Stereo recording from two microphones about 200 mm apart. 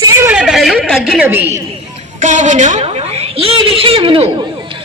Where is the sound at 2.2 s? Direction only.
35° right (ahead or behind).